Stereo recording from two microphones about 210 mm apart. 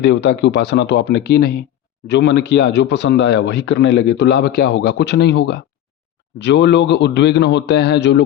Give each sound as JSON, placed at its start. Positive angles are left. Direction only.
{"t": 0.0, "sound": "speech", "side_deg": 50}